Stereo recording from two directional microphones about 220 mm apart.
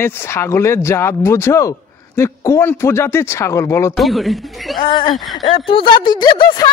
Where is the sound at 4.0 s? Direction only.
Centre (ahead or behind).